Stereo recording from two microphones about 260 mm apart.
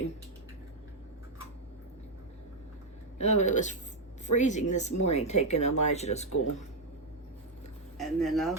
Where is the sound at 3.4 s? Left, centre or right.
Left.